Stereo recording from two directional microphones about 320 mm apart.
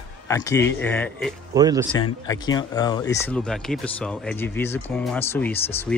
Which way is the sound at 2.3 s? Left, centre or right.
Centre.